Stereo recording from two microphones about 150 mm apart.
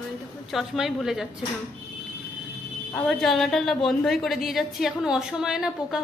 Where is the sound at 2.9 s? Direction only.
5° left (ahead or behind).